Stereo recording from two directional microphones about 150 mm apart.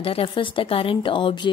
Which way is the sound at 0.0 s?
40° left (ahead or behind).